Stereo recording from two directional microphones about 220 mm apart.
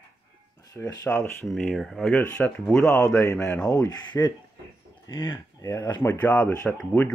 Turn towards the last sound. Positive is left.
turn(degrees=5)  # may be behind; listen again after turning